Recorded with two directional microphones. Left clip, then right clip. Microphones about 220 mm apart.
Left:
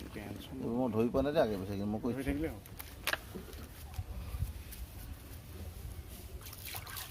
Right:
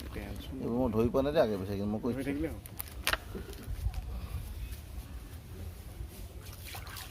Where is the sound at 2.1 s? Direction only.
20° left (ahead or behind).